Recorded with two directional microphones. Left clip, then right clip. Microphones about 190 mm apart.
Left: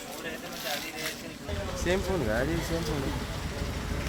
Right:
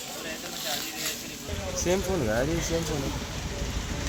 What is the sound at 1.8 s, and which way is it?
Speech, 60° right (ahead or behind).